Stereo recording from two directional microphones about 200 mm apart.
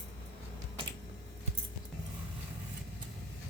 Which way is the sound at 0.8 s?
25° right (ahead or behind).